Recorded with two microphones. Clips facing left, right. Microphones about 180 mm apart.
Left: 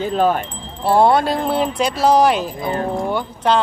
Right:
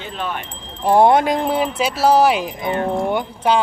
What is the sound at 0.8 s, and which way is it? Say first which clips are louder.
Speech: right 1 dB; 15° right (ahead or behind).